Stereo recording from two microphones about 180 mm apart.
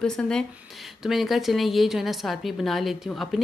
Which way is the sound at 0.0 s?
5° left (ahead or behind).